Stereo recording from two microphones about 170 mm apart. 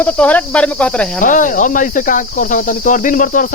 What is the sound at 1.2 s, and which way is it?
Cricket, 50° left (ahead or behind).